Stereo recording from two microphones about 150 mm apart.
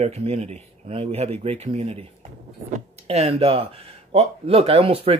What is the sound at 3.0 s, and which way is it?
Speech, 45° right (ahead or behind).